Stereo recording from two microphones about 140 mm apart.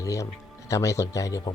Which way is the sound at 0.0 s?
25° left (ahead or behind).